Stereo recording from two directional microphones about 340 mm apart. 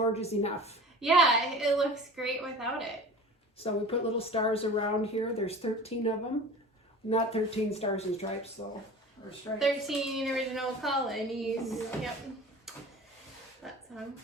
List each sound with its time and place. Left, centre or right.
0.1 s speech: centre
1.0 s a woman's voice: centre
3.6 s speech: centre
9.6 s a woman's voice: centre
12.7 s a sound: centre